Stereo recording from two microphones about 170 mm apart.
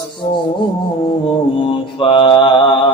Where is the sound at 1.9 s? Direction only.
30° left (ahead or behind).